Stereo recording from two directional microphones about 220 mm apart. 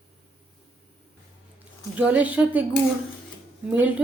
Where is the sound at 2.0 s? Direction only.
5° right (ahead or behind).